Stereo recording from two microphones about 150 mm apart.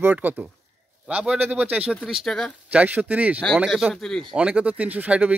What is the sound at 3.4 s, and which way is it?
Speech, centre (ahead or behind).